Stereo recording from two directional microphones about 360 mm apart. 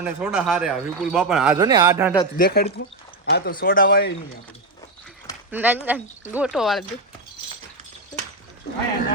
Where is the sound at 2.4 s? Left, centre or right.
Left.